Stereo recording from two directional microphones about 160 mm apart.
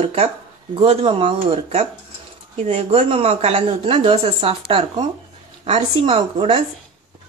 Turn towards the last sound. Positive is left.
turn(degrees=-35)  # may be behind; listen again after turning